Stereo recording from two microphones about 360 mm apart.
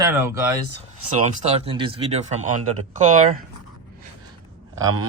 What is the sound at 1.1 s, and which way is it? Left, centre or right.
Speech, centre.